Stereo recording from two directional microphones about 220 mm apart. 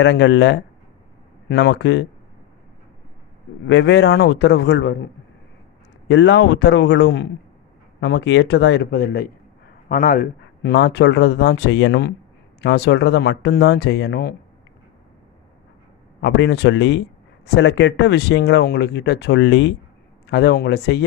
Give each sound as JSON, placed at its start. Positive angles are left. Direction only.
{"t": 0.0, "sound": "speech", "side_deg": 55}
{"t": 3.7, "sound": "speech", "side_deg": 55}
{"t": 6.1, "sound": "a man's voice", "side_deg": 55}
{"t": 16.2, "sound": "speech", "side_deg": 55}